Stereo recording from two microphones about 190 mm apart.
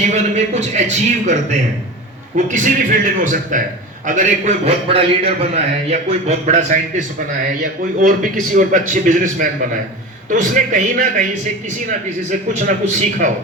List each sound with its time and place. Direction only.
0.1 s a man's voice: 35° right (ahead or behind)
2.3 s a man's voice: 40° right (ahead or behind)